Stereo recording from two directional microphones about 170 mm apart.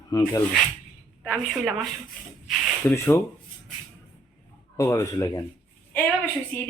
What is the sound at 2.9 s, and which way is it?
Speech, 15° left (ahead or behind).